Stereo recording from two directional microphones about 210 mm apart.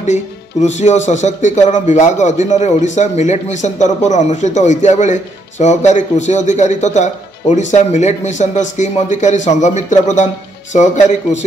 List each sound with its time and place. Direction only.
0.0 s speech: 35° left (ahead or behind)